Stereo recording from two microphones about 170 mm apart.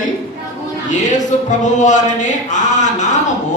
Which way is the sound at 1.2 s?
45° left (ahead or behind).